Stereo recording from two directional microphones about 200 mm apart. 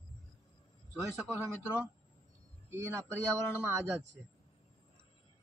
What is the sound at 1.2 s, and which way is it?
Speech, 5° right (ahead or behind).